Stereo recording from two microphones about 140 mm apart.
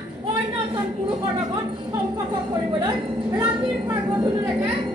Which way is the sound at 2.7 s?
30° right (ahead or behind).